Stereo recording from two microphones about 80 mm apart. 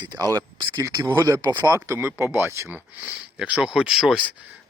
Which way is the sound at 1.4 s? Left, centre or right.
Right.